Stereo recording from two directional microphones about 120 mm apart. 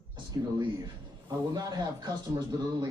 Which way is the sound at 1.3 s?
30° right (ahead or behind).